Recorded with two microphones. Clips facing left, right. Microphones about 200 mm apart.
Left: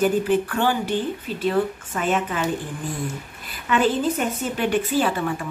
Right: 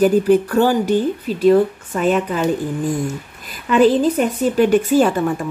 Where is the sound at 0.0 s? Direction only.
40° right (ahead or behind).